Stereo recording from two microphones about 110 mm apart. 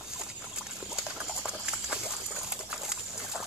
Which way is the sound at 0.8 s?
10° right (ahead or behind).